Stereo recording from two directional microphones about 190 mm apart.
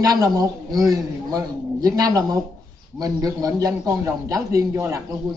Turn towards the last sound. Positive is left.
turn(degrees=-15)  # may be behind; listen again after turning